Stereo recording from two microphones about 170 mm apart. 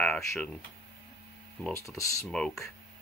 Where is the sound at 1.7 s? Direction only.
20° left (ahead or behind).